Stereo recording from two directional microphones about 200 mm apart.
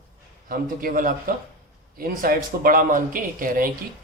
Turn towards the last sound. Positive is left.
turn(degrees=-45)  # may be behind; listen again after turning